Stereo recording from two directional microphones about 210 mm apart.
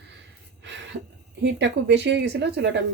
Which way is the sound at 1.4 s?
55° right (ahead or behind).